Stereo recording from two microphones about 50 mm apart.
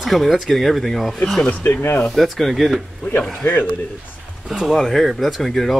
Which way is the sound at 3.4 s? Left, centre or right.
Left.